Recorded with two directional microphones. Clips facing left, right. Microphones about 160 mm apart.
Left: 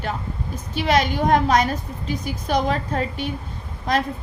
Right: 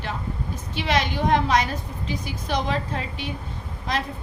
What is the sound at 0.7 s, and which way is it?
A woman's voice, 40° left (ahead or behind).